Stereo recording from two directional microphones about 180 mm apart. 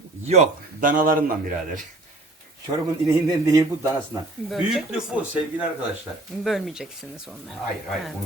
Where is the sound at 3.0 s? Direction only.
20° right (ahead or behind).